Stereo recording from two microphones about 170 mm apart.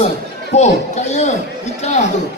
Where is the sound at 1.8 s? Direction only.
45° left (ahead or behind).